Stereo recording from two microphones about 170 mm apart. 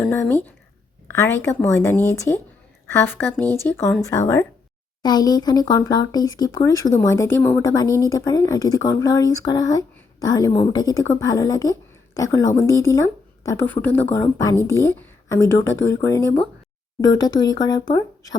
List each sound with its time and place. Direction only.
0.0 s speech: 15° left (ahead or behind)
5.0 s a woman's voice: 25° left (ahead or behind)